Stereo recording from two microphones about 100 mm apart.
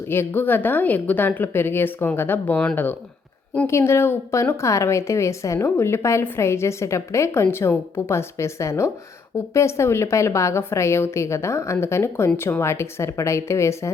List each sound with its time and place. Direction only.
0.1 s a woman's voice: 20° left (ahead or behind)
3.7 s a woman's voice: 25° left (ahead or behind)